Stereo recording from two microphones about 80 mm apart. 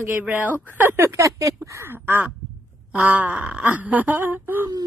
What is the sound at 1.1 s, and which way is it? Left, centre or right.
Speech, right.